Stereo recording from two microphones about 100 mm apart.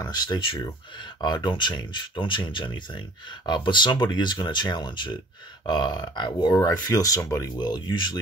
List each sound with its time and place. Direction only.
0.0 s speech: 45° left (ahead or behind)